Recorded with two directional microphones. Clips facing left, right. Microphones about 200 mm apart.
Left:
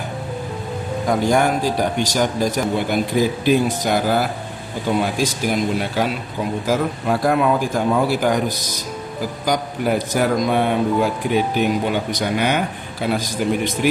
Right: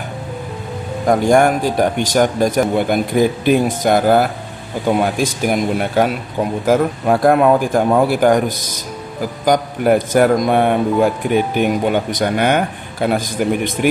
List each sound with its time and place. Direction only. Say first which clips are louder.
1.0 s speech: right 5 dB; 50° right (ahead or behind)